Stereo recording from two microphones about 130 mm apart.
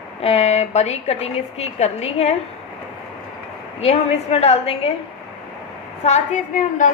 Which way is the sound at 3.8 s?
55° left (ahead or behind).